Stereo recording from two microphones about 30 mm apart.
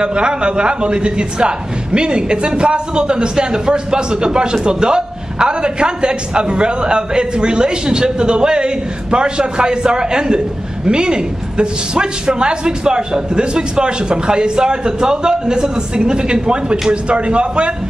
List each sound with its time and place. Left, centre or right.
0.0 s a man's voice: right